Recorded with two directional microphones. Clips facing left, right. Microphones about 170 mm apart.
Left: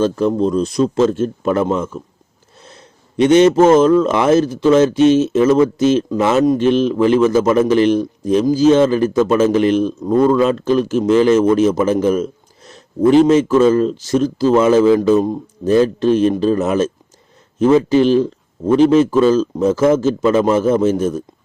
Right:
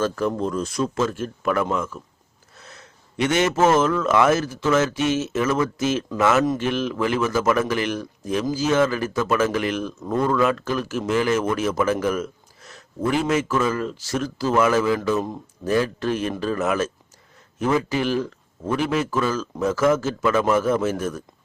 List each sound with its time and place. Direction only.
0.0 s a man's voice: 20° left (ahead or behind)